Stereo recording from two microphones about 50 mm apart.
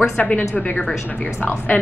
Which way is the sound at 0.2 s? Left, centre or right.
Left.